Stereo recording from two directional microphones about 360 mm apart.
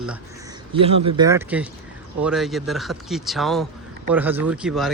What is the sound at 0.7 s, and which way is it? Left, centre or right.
Speech, centre.